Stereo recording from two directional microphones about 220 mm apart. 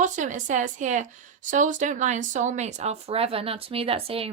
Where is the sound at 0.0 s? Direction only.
35° right (ahead or behind).